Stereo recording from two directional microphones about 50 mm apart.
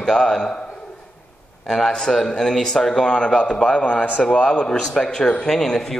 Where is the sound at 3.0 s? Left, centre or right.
Centre.